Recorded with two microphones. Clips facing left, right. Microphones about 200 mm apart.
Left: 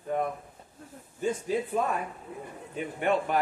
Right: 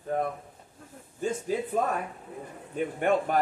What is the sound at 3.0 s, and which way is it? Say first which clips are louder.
Speech: right 1 dB; 45° right (ahead or behind).